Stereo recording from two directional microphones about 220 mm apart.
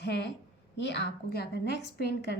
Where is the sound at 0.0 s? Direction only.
50° left (ahead or behind).